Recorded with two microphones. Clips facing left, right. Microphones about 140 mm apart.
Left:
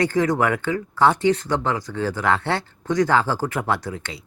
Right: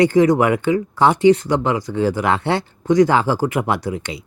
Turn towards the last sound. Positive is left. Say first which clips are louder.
# right 4 dB
turn(degrees=-15)  # may be behind; listen again after turning